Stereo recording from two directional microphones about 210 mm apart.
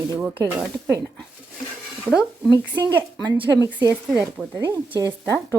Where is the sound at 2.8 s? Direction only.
20° right (ahead or behind).